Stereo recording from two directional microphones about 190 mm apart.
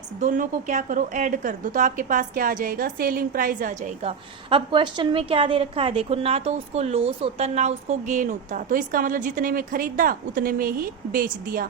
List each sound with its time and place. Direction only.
0.2 s a woman's voice: 40° right (ahead or behind)